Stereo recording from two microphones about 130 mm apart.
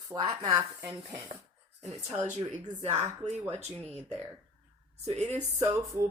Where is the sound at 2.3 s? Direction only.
65° right (ahead or behind).